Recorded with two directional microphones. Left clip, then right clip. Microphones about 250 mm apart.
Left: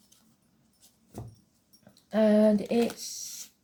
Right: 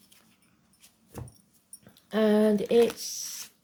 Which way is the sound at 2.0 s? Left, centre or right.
Right.